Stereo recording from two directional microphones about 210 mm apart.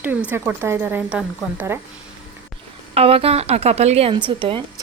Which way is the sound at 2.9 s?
25° right (ahead or behind).